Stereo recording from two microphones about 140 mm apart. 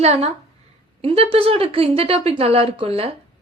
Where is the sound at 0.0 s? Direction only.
50° right (ahead or behind).